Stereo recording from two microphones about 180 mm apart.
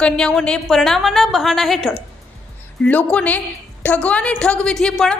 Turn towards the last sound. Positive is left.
turn(degrees=0)  # may be behind; listen again after turning